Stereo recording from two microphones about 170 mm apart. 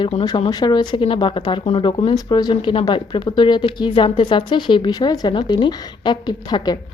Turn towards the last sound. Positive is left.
turn(degrees=25)  # may be behind; listen again after turning